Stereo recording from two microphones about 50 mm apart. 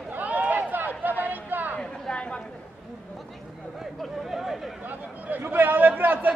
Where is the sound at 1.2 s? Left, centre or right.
Right.